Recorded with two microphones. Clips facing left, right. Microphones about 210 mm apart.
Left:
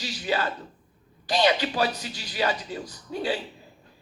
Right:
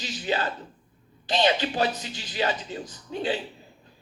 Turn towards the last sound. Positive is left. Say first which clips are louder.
# even
turn(degrees=-25)  # may be behind; listen again after turning